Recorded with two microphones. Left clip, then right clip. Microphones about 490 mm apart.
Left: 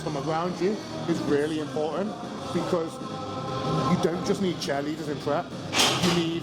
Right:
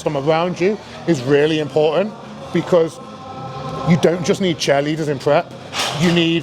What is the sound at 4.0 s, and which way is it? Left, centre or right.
Speech, right.